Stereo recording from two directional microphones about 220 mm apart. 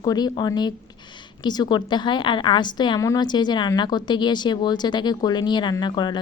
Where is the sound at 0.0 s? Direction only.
20° left (ahead or behind).